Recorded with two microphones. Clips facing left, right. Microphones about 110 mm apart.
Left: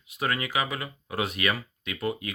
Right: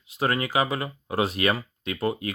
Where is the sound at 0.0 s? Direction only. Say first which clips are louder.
Right 4 dB; 30° right (ahead or behind).